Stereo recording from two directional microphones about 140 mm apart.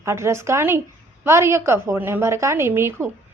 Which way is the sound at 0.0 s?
20° right (ahead or behind).